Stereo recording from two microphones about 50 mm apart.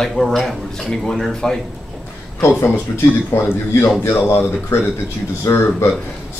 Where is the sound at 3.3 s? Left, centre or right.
Left.